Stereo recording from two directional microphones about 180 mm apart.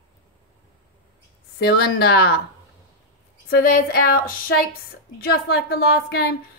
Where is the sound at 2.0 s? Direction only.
60° left (ahead or behind).